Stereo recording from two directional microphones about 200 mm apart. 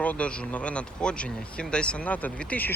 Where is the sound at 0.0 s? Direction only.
5° left (ahead or behind).